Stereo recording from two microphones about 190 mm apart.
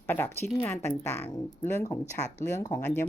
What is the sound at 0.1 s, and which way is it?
A woman's voice, 10° left (ahead or behind).